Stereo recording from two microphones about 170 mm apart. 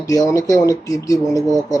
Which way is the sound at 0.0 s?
20° left (ahead or behind).